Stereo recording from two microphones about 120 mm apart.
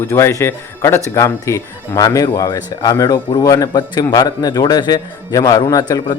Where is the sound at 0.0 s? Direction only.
25° left (ahead or behind).